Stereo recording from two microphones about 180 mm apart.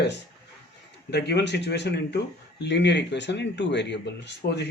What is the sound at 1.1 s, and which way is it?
Speech, 70° left (ahead or behind).